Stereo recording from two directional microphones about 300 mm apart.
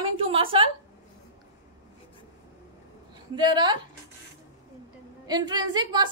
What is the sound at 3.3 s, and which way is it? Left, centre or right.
Speech, centre.